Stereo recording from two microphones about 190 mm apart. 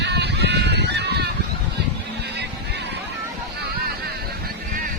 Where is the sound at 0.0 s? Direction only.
60° right (ahead or behind).